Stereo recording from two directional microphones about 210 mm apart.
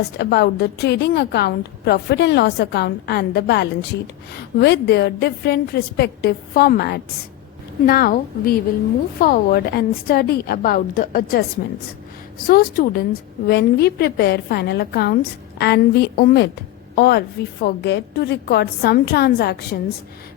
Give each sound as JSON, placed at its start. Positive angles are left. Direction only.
{"t": 0.2, "sound": "a woman's voice", "side_deg": 50}
{"t": 12.5, "sound": "a woman's voice", "side_deg": 45}